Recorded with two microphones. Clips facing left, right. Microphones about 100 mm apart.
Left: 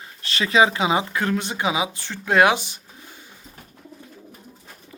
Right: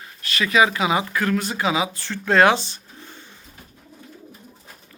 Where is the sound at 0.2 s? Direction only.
30° left (ahead or behind); by 3.2 s 10° left (ahead or behind).